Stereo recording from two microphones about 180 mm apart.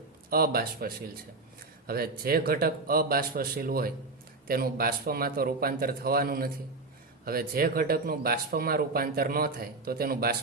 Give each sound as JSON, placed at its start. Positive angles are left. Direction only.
{"t": 0.3, "sound": "speech", "side_deg": -55}